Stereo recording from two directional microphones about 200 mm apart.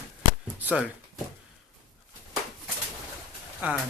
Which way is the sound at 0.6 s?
10° right (ahead or behind).